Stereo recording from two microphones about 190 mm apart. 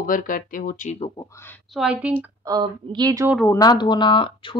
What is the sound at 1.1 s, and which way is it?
Speech, 15° left (ahead or behind).